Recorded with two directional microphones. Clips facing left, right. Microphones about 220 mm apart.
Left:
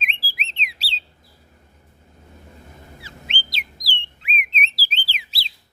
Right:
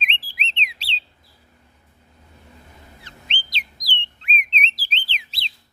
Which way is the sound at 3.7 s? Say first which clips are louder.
Even; 10° left (ahead or behind).